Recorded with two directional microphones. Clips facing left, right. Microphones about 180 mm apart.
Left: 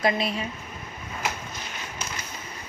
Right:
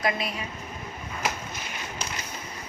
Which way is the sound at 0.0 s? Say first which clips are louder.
Left 4 dB; 30° left (ahead or behind).